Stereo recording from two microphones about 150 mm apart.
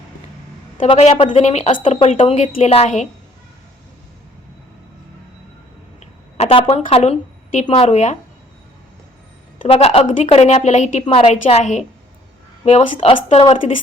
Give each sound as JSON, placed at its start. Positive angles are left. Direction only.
{"t": 0.8, "sound": "a woman's voice", "side_deg": 45}
{"t": 6.3, "sound": "a woman's voice", "side_deg": 40}
{"t": 9.6, "sound": "a woman's voice", "side_deg": 40}
{"t": 11.0, "sound": "a woman's voice", "side_deg": 40}